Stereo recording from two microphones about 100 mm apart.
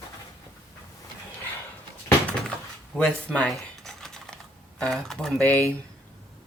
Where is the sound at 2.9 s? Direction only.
10° left (ahead or behind).